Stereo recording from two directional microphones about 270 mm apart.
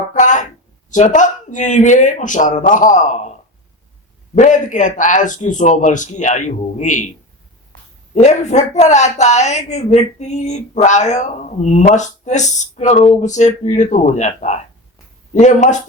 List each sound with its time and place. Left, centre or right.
0.1 s a sound: left
0.9 s speech: left
4.4 s speech: left
8.1 s speech: left